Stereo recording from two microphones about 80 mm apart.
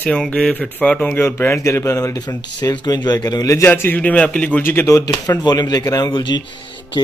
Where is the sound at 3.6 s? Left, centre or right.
Left.